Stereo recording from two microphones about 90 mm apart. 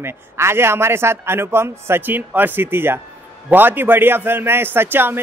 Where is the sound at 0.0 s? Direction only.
30° right (ahead or behind).